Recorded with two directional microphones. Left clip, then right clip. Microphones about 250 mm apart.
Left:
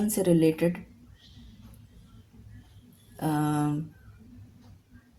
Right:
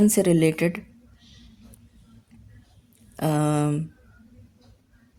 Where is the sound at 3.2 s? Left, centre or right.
Right.